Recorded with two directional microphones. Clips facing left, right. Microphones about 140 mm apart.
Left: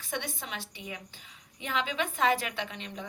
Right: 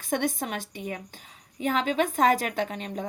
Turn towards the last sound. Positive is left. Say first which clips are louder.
# right 8 dB
turn(degrees=-45)  # may be behind; listen again after turning